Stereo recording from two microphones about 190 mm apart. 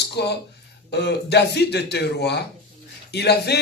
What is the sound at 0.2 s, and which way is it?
Speech, 60° left (ahead or behind).